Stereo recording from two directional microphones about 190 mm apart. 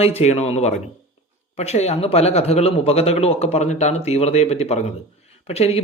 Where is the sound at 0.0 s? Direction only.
35° left (ahead or behind).